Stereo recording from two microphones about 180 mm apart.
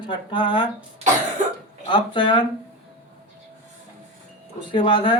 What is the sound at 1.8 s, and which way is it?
Speech, 25° left (ahead or behind).